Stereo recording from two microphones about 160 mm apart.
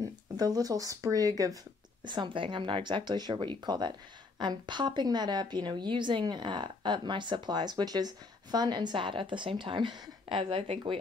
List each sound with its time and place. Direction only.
0.0 s a woman's voice: 25° right (ahead or behind)